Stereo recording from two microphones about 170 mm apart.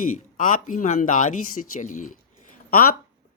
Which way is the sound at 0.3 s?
50° left (ahead or behind).